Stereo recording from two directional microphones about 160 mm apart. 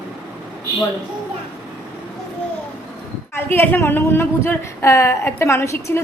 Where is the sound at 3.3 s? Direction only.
15° left (ahead or behind).